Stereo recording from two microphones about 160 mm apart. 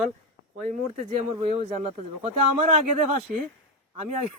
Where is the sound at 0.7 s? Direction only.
50° right (ahead or behind).